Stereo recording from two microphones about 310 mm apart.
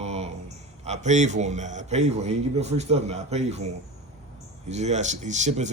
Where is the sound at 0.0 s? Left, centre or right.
Right.